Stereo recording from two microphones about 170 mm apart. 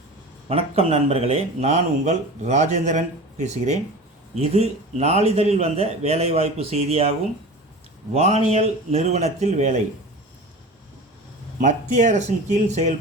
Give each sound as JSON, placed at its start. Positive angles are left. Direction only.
{"t": 0.4, "sound": "speech", "side_deg": -35}
{"t": 8.1, "sound": "speech", "side_deg": -40}
{"t": 11.6, "sound": "speech", "side_deg": -45}